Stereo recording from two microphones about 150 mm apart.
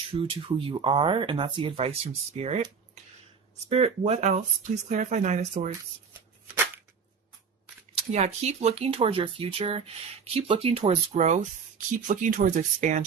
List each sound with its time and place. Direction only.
0.1 s speech: 35° right (ahead or behind)
3.7 s speech: 40° right (ahead or behind)
7.9 s speech: 45° right (ahead or behind)
12.0 s speech: 60° right (ahead or behind)